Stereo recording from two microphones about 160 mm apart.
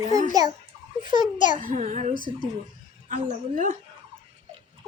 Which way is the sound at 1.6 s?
55° right (ahead or behind).